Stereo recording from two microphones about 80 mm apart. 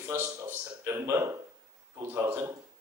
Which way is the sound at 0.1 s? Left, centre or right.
Right.